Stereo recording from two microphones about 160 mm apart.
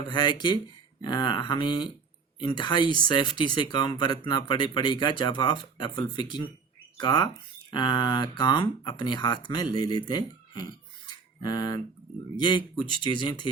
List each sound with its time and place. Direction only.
0.1 s speech: 30° left (ahead or behind)